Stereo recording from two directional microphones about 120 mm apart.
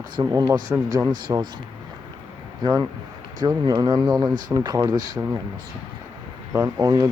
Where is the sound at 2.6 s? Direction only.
35° right (ahead or behind).